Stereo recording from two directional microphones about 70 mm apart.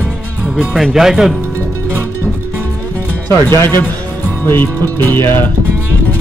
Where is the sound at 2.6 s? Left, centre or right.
Left.